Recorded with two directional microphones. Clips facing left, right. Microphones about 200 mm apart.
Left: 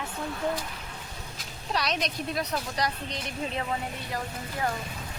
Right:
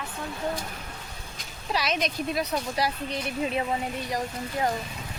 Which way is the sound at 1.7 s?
Centre (ahead or behind).